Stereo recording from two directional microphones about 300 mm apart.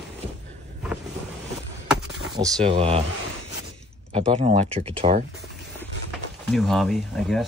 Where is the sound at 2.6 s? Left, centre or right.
Centre.